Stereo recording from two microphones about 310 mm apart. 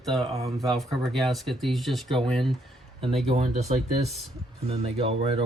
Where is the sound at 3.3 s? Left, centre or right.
Centre.